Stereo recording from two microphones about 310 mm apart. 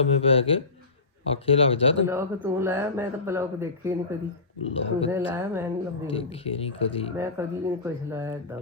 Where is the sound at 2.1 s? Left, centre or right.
Centre.